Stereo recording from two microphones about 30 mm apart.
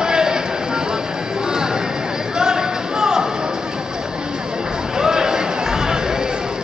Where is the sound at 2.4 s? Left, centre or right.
Right.